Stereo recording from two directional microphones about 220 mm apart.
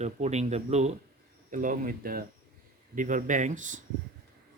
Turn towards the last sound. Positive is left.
turn(degrees=-35)  # may be behind; listen again after turning